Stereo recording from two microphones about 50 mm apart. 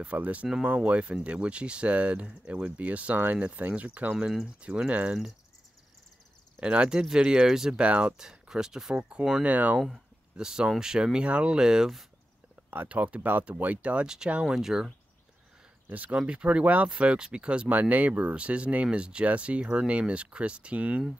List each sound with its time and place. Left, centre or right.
0.0 s speech: right
6.6 s speech: right
7.8 s speech: right
8.2 s speech: centre
9.4 s speech: right
10.3 s speech: centre
12.8 s speech: right
14.0 s speech: centre
15.9 s speech: right
16.2 s speech: right
17.6 s speech: right